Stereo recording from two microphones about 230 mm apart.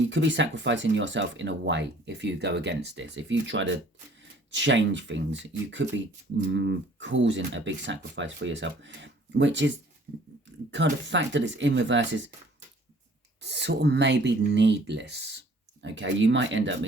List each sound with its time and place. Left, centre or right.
0.1 s speech: right
11.0 s speech: right
13.4 s speech: right